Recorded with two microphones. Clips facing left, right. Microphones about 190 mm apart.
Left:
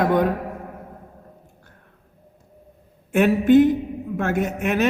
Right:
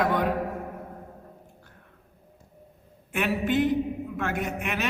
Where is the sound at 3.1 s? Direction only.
50° left (ahead or behind).